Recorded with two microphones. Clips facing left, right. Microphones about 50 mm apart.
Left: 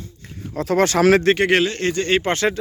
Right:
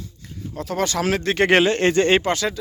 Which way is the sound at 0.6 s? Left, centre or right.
Left.